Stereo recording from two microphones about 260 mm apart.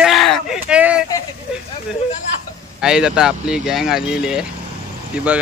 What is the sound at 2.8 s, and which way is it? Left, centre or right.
Speech, centre.